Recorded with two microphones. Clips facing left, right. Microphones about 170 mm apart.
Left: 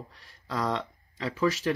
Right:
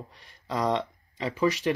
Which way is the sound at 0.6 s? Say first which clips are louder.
Right 3 dB; 15° right (ahead or behind).